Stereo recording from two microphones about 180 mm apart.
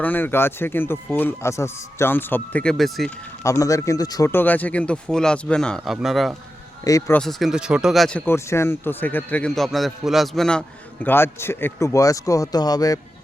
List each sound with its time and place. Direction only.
0.0 s speech: 10° left (ahead or behind)
3.4 s speech: 15° left (ahead or behind); by 6.3 s centre (ahead or behind)
6.8 s speech: 20° left (ahead or behind)
7.2 s speech: centre (ahead or behind); by 13.0 s 20° left (ahead or behind)